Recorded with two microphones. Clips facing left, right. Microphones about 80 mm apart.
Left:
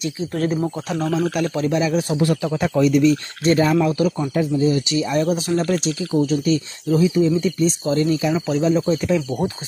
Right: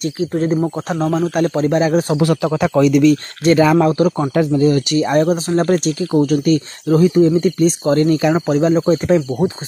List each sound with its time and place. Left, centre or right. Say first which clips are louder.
0.3 s speech: right 4 dB; right
0.8 s a man's voice: right 3 dB; right
2.1 s speech: right 4 dB; right
3.7 s speech: right 5 dB; right
4.3 s speech: right 5 dB; right